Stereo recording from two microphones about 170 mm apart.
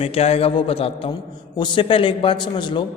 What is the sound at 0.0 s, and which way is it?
A man's voice, 35° left (ahead or behind).